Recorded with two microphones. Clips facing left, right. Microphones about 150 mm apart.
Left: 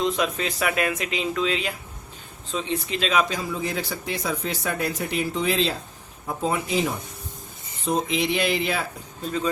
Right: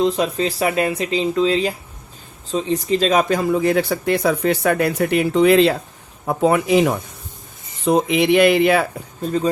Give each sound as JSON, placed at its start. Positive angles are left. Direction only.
{"t": 0.0, "sound": "speech", "side_deg": -30}
{"t": 9.2, "sound": "speech", "side_deg": -40}